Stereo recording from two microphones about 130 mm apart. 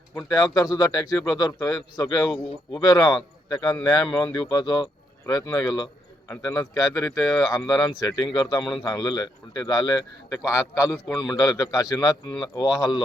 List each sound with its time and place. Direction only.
0.2 s speech: 25° left (ahead or behind)
5.2 s speech: 20° left (ahead or behind)
12.6 s speech: 5° right (ahead or behind)